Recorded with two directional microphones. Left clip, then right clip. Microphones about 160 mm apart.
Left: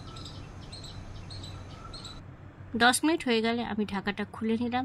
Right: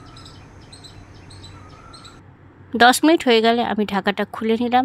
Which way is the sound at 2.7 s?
40° right (ahead or behind).